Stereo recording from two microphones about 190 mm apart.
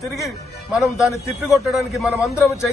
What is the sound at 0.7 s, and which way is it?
A man's voice, centre (ahead or behind).